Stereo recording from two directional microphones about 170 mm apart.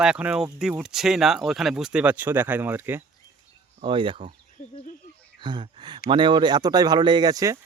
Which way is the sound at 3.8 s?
30° right (ahead or behind).